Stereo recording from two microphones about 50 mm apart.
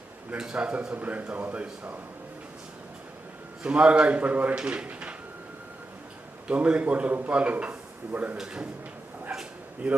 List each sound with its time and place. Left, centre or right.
0.3 s a man's voice: centre
3.6 s a man's voice: right
6.5 s a man's voice: right
7.1 s a man's voice: right
7.3 s speech: right
9.3 s dog: centre
9.8 s a man's voice: centre